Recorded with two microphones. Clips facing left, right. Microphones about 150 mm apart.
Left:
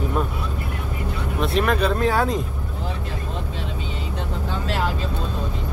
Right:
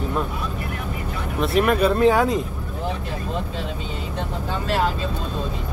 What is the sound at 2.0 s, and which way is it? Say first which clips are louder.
Speech: right 4 dB; 20° right (ahead or behind).